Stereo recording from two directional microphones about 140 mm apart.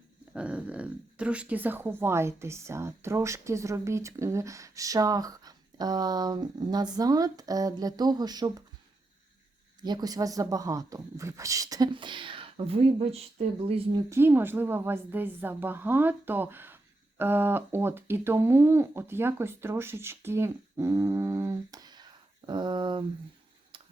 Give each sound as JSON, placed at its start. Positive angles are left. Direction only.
{"t": 0.3, "sound": "speech", "side_deg": -10}
{"t": 9.8, "sound": "speech", "side_deg": -30}
{"t": 14.1, "sound": "speech", "side_deg": -15}